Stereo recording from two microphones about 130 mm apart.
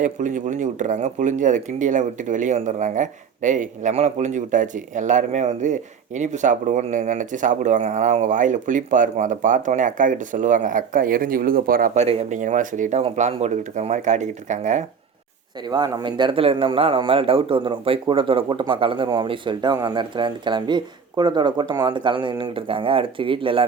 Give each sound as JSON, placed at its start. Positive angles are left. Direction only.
{"t": 0.0, "sound": "speech", "side_deg": -75}
{"t": 12.0, "sound": "speech", "side_deg": -70}
{"t": 13.0, "sound": "speech", "side_deg": -60}
{"t": 15.6, "sound": "speech", "side_deg": -35}